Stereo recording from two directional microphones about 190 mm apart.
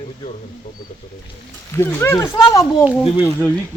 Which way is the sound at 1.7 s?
15° left (ahead or behind).